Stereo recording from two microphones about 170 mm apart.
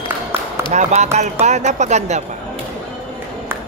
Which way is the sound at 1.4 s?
40° right (ahead or behind).